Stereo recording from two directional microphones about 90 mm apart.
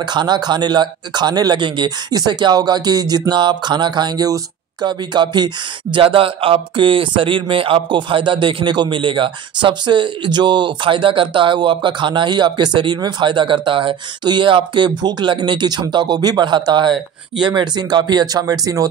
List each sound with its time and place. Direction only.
0.0 s speech: 55° right (ahead or behind)
5.9 s speech: 85° right; by 18.9 s 40° right (ahead or behind)